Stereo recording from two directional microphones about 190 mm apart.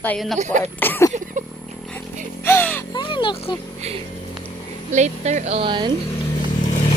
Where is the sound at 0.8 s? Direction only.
10° left (ahead or behind).